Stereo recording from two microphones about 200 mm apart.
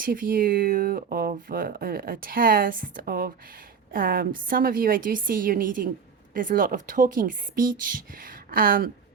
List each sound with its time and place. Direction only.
0.0 s speech: 45° right (ahead or behind)